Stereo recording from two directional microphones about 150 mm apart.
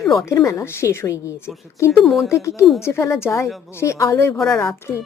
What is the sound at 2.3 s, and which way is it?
A woman's voice, 20° left (ahead or behind).